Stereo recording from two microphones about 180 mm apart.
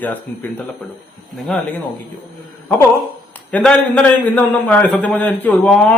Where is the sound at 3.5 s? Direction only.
5° left (ahead or behind).